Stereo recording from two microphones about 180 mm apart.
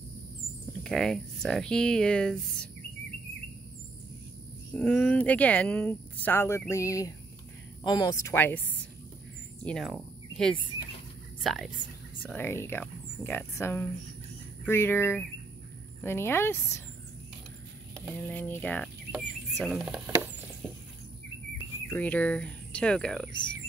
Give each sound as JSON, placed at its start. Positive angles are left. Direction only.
{"t": 0.8, "sound": "speech", "side_deg": 0}
{"t": 4.7, "sound": "speech", "side_deg": 5}
{"t": 12.3, "sound": "speech", "side_deg": 10}
{"t": 18.2, "sound": "speech", "side_deg": 10}
{"t": 21.8, "sound": "speech", "side_deg": 10}